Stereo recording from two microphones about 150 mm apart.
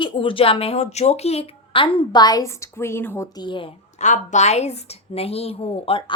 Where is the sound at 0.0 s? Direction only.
35° left (ahead or behind); by 3.2 s 15° left (ahead or behind).